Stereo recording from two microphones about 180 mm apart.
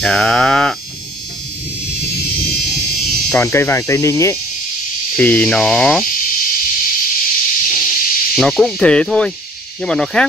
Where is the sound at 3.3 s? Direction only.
15° left (ahead or behind).